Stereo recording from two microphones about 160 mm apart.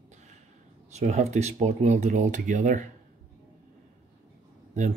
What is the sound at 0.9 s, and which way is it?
Speech, 45° right (ahead or behind).